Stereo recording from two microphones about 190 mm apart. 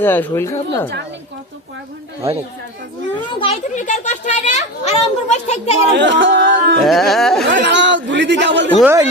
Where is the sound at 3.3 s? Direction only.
25° left (ahead or behind).